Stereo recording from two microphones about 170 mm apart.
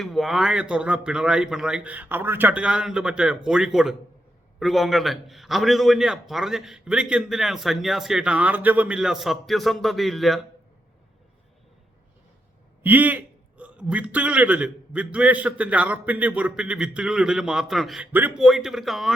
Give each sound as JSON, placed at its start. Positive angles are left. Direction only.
{"t": 0.0, "sound": "a man's voice", "side_deg": 0}
{"t": 12.8, "sound": "a man's voice", "side_deg": -10}